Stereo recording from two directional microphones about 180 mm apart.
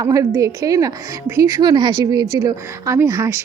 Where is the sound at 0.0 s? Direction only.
20° right (ahead or behind).